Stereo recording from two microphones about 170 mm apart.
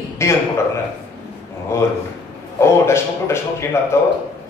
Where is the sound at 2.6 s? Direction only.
15° left (ahead or behind).